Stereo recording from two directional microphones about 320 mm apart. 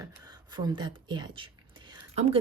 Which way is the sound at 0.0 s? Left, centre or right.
Centre.